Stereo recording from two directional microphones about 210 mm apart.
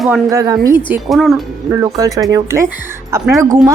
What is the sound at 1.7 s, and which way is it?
Speech, 15° right (ahead or behind).